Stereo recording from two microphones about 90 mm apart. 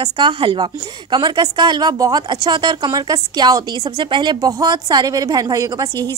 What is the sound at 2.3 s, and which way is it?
A woman's voice, 55° right (ahead or behind).